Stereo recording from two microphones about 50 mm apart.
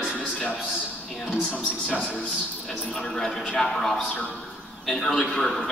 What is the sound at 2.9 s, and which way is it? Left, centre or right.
A man's voice, centre.